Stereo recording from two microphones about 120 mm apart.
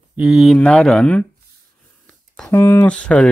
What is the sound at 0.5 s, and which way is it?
Speech, 10° left (ahead or behind).